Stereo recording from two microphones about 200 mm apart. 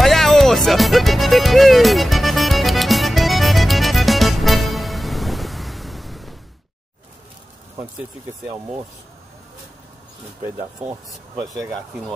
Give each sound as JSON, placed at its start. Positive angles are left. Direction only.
{"t": 0.0, "sound": "music", "side_deg": 0}
{"t": 10.4, "sound": "speech", "side_deg": -15}